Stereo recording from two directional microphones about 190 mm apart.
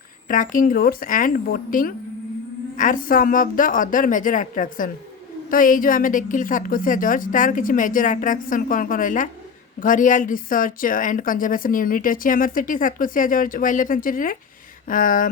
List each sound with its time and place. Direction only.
0.3 s speech: 45° left (ahead or behind)